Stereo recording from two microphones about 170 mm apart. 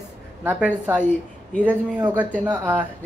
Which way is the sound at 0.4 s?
10° right (ahead or behind).